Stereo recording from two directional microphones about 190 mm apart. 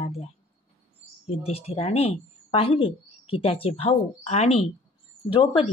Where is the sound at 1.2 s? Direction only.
30° left (ahead or behind).